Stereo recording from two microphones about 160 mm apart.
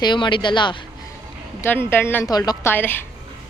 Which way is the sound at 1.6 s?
15° left (ahead or behind).